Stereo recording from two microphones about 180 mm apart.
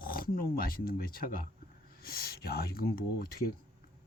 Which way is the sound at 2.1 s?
60° left (ahead or behind).